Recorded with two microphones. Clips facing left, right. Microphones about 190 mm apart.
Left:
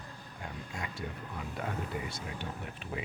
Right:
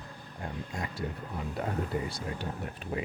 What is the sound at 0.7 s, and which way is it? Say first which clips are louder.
Speech: right 3 dB; 35° right (ahead or behind).